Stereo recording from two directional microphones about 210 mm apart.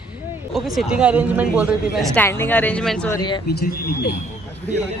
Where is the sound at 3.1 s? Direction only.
20° left (ahead or behind).